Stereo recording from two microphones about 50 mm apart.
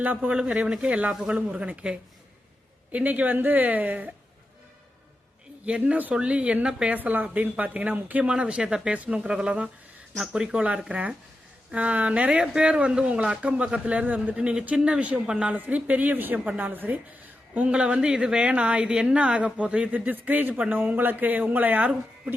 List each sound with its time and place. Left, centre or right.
0.0 s speech: right
0.3 s speech: centre
5.6 s speech: right
6.9 s speech: right
8.2 s speech: right
14.3 s speech: centre
15.5 s speech: right
17.7 s speech: centre